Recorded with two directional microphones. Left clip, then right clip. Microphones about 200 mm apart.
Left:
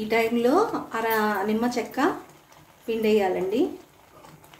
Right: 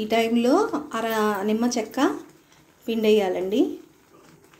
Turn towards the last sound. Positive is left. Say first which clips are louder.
# right 2 dB
turn(degrees=-40)  # may be behind; listen again after turning